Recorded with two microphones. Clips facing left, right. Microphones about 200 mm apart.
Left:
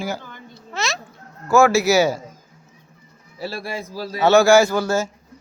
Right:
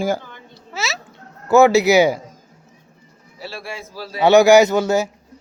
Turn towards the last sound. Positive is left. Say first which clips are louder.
# right 3 dB
turn(degrees=-20)  # may be behind; listen again after turning